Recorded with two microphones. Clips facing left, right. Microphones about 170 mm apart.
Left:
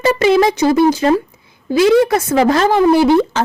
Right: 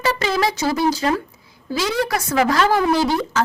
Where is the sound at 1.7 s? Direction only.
60° left (ahead or behind).